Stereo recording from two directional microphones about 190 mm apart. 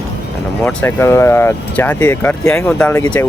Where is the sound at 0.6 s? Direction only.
10° left (ahead or behind).